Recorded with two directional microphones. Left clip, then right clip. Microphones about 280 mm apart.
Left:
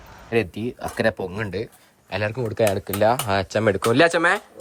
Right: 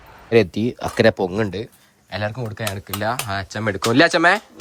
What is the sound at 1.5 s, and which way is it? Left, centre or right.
Speech, centre.